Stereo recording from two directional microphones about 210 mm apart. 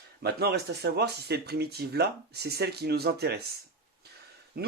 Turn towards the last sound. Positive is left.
turn(degrees=-45)  # may be behind; listen again after turning